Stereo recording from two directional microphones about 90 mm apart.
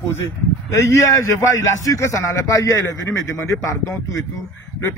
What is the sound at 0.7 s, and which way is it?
A man's voice, 35° left (ahead or behind).